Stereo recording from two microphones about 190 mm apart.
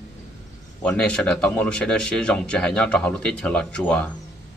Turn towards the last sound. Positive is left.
turn(degrees=5)  # may be behind; listen again after turning